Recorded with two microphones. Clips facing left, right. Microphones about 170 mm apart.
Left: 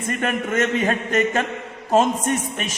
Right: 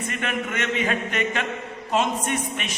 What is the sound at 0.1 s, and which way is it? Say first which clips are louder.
A man's voice: left 8 dB; 45° left (ahead or behind).